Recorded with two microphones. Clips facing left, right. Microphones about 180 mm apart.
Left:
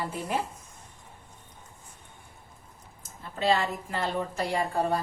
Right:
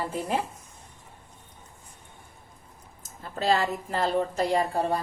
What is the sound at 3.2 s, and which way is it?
Speech, 40° right (ahead or behind).